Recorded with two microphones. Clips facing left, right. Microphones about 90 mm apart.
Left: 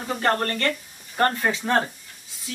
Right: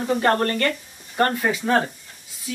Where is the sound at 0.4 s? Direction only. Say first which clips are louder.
Right 3 dB; 10° right (ahead or behind).